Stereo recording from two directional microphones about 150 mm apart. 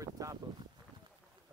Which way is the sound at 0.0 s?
20° right (ahead or behind).